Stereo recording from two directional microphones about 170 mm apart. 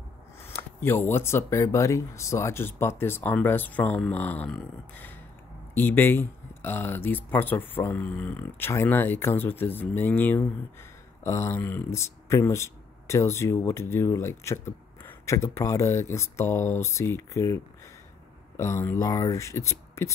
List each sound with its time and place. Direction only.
0.5 s speech: 15° left (ahead or behind)
18.6 s speech: 15° left (ahead or behind)